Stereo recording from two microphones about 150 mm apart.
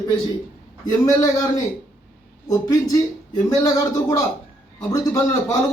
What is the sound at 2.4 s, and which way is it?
A man's voice, 25° left (ahead or behind).